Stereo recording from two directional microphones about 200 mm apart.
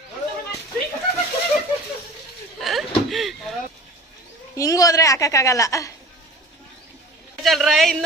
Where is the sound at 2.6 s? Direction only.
Centre (ahead or behind).